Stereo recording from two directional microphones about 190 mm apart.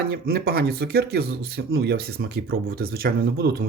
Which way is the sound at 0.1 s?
55° right (ahead or behind).